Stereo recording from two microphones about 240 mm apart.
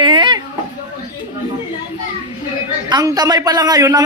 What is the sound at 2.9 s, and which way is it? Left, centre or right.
A man's voice, centre.